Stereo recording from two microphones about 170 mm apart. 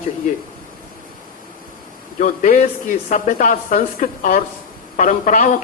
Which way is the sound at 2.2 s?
50° left (ahead or behind).